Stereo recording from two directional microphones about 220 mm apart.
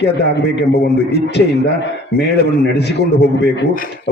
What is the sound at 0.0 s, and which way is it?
A man's voice, 50° left (ahead or behind).